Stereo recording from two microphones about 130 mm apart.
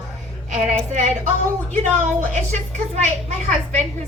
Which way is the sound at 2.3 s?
65° right (ahead or behind).